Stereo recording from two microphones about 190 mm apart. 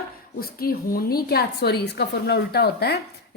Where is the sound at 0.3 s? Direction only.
50° left (ahead or behind).